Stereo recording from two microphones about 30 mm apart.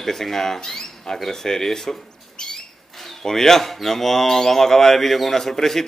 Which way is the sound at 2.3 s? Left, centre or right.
Left.